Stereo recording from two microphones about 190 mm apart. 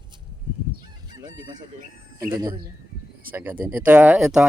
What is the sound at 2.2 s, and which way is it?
Speech, 15° right (ahead or behind).